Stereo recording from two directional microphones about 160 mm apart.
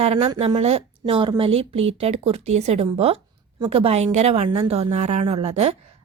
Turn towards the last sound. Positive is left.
turn(degrees=-40)  # may be behind; listen again after turning